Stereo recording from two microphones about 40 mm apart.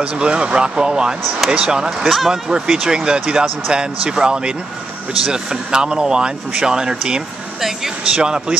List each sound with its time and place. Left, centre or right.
0.2 s speech: right
1.9 s speech: centre
2.5 s speech: centre